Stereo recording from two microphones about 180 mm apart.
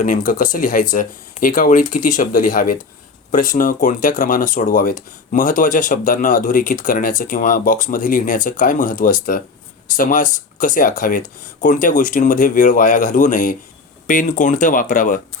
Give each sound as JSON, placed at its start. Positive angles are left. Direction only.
{"t": 0.3, "sound": "speech", "side_deg": 45}